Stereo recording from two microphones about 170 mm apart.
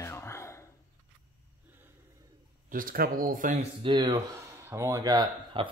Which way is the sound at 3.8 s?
25° right (ahead or behind).